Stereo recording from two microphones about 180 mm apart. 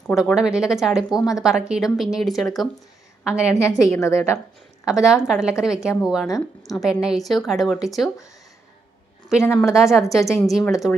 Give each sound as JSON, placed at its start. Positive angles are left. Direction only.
{"t": 0.1, "sound": "speech", "side_deg": 0}
{"t": 3.5, "sound": "a woman's voice", "side_deg": 20}
{"t": 4.9, "sound": "speech", "side_deg": -5}
{"t": 9.6, "sound": "speech", "side_deg": 0}